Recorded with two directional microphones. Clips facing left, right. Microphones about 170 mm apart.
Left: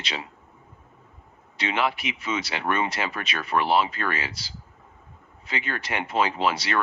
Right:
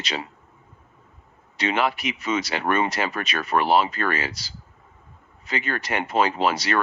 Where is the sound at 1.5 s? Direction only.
45° right (ahead or behind).